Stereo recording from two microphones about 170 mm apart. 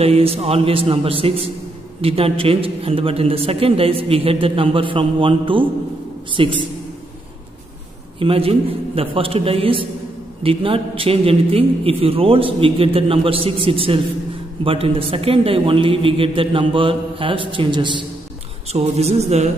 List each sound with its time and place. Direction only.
0.0 s a man's voice: 35° right (ahead or behind)
8.2 s a man's voice: 35° right (ahead or behind)
18.7 s a man's voice: 40° right (ahead or behind)